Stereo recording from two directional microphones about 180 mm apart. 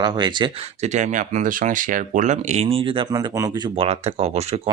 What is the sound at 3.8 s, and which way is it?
Speech, 35° right (ahead or behind).